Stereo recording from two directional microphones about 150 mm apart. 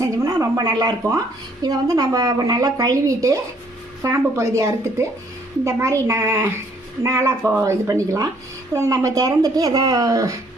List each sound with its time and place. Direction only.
0.0 s a woman's voice: 20° right (ahead or behind)